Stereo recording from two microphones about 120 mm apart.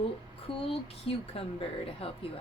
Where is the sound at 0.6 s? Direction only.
55° left (ahead or behind).